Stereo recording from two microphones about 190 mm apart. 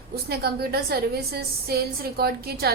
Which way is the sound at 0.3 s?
55° right (ahead or behind).